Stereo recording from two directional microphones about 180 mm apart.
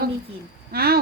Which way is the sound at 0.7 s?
60° right (ahead or behind).